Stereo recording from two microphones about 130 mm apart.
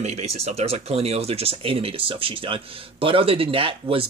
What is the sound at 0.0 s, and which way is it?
Speech, 55° right (ahead or behind).